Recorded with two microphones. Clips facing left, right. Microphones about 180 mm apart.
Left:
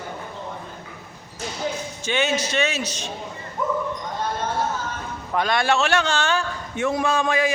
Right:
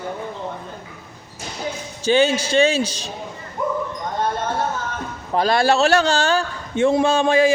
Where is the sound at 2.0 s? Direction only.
30° right (ahead or behind).